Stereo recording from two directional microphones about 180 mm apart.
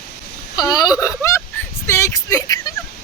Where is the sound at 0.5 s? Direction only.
20° left (ahead or behind).